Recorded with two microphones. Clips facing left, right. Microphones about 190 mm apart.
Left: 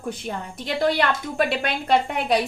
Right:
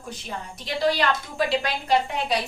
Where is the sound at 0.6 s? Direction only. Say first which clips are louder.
Left 2 dB; 55° left (ahead or behind).